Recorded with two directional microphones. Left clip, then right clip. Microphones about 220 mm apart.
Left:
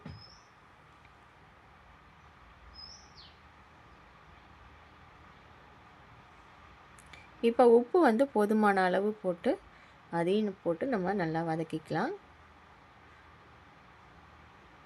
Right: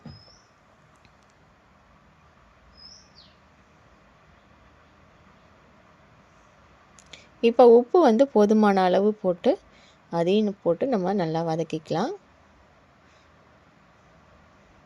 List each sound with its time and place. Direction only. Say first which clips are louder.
7.1 s speech: right 7 dB; 20° right (ahead or behind)